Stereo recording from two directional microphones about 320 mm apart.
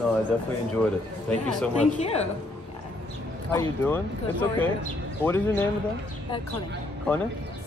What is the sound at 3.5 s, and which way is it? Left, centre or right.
Speech, centre.